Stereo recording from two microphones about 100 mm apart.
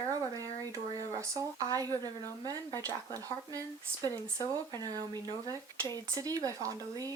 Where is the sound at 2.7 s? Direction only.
25° left (ahead or behind).